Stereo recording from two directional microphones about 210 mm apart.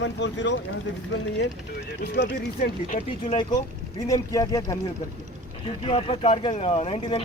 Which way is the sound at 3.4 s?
20° left (ahead or behind).